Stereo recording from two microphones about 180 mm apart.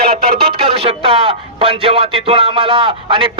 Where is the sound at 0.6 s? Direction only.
30° right (ahead or behind).